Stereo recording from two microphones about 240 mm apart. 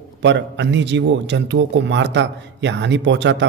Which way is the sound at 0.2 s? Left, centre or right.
Right.